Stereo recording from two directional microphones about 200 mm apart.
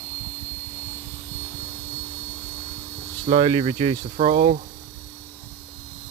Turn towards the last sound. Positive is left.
turn(degrees=-30)  # may be behind; listen again after turning